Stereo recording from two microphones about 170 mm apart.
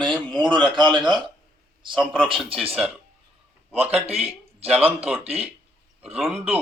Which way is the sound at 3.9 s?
35° right (ahead or behind).